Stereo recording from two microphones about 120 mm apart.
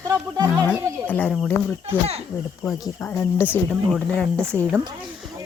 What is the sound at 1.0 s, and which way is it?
Speech, 15° left (ahead or behind).